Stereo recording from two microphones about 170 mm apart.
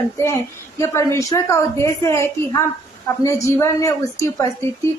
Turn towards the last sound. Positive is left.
turn(degrees=20)  # may be behind; listen again after turning